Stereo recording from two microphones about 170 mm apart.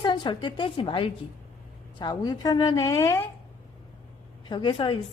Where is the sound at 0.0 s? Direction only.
25° left (ahead or behind).